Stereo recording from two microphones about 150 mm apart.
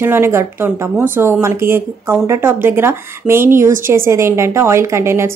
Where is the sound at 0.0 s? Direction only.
15° right (ahead or behind).